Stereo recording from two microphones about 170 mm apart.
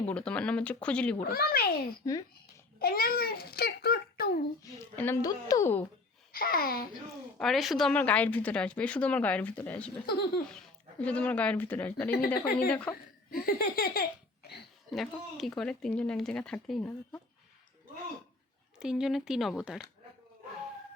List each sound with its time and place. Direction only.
0.1 s a woman's voice: 5° left (ahead or behind)
1.2 s speech: 60° left (ahead or behind)
2.7 s babbling: 60° left (ahead or behind)
4.9 s a woman's voice: 15° left (ahead or behind)
6.3 s speech: 60° left (ahead or behind)
7.3 s a woman's voice: centre (ahead or behind)
10.1 s laughter: 65° left (ahead or behind)
11.0 s a woman's voice: 10° left (ahead or behind)
12.1 s speech: 55° left (ahead or behind)
12.9 s speech: 20° left (ahead or behind)
13.3 s speech: 60° left (ahead or behind)
14.8 s speech: centre (ahead or behind)
18.8 s speech: 5° right (ahead or behind)